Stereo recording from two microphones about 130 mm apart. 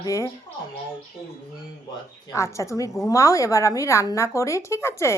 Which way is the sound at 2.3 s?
25° left (ahead or behind).